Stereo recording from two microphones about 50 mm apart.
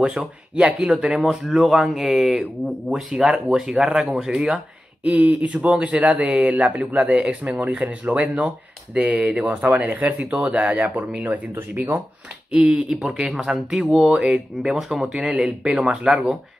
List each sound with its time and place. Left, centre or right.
0.7 s speech: centre
3.1 s speech: centre
5.0 s speech: right
5.9 s speech: right
12.6 s speech: centre